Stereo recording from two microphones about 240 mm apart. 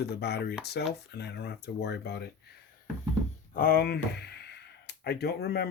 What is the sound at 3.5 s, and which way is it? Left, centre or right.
Speech, left.